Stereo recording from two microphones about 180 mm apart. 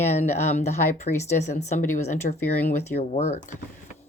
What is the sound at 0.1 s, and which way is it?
Speech, 40° left (ahead or behind).